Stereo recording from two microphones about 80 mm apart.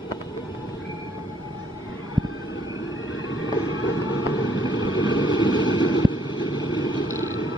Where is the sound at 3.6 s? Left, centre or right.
Right.